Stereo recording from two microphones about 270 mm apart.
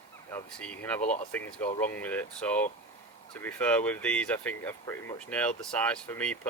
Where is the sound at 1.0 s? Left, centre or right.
Left.